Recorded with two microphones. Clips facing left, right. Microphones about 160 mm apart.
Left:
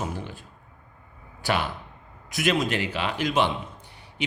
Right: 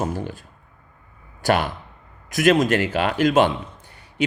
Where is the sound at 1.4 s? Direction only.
45° right (ahead or behind).